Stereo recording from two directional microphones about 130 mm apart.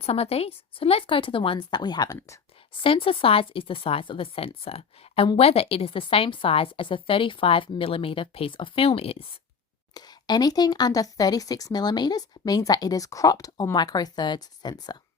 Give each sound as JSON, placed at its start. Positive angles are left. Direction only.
{"t": 0.0, "sound": "a woman's voice", "side_deg": 50}
{"t": 2.8, "sound": "a woman's voice", "side_deg": 45}
{"t": 9.9, "sound": "a woman's voice", "side_deg": 30}